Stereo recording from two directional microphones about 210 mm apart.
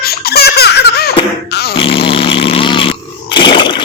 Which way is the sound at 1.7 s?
25° left (ahead or behind).